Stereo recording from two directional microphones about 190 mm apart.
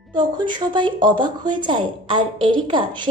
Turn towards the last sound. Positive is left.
turn(degrees=-25)  # may be behind; listen again after turning